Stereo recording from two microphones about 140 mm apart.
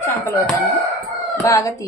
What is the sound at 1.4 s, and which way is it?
Speech, 25° left (ahead or behind).